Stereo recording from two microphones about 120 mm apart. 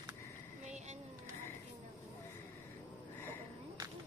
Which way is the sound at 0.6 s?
70° right (ahead or behind).